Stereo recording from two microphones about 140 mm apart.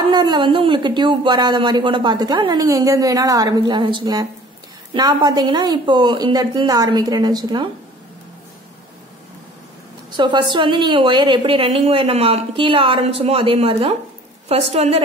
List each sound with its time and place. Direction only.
0.1 s a woman's voice: 30° right (ahead or behind)
10.1 s a woman's voice: 35° right (ahead or behind)